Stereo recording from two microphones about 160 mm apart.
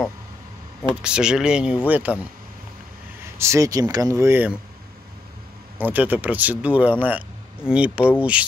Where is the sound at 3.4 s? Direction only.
20° right (ahead or behind).